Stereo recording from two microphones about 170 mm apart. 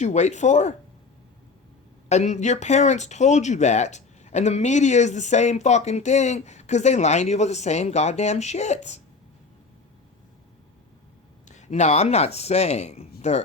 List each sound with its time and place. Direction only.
0.0 s speech: 40° left (ahead or behind)
2.0 s speech: 40° left (ahead or behind)
11.4 s speech: 45° left (ahead or behind)